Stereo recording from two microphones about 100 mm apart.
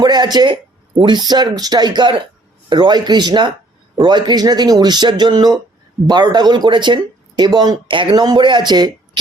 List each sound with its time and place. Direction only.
0.0 s speech: 45° right (ahead or behind)